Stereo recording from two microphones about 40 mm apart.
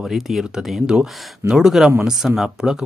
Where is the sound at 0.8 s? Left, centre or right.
Centre.